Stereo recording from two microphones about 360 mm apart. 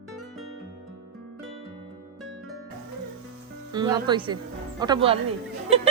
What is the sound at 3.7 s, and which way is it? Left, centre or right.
Speech, centre.